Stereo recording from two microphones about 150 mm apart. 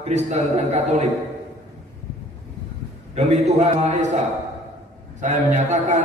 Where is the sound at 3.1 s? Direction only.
50° right (ahead or behind).